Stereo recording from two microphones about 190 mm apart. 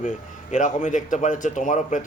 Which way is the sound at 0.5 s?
40° left (ahead or behind).